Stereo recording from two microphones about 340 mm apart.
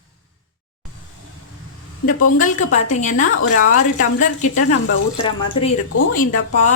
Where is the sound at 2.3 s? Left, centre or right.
Left.